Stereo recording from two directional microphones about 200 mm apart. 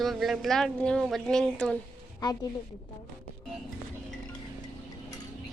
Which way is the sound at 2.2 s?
20° left (ahead or behind).